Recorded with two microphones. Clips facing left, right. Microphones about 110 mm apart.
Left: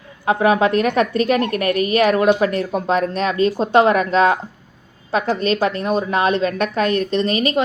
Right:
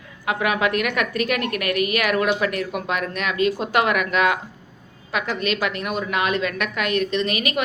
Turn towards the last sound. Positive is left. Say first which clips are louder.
# left 5 dB
turn(degrees=30)  # may be behind; listen again after turning